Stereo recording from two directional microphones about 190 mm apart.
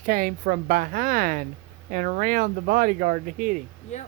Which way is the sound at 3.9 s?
35° left (ahead or behind).